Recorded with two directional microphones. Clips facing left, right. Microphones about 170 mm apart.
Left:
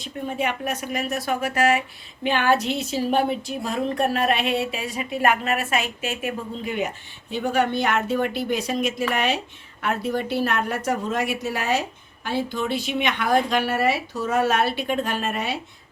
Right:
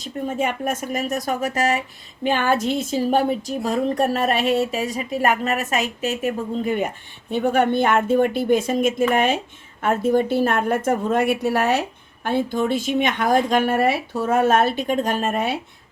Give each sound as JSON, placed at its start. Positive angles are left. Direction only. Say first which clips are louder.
{"t": 0.0, "sound": "speech", "louder": "right 3 dB", "side_deg": -45}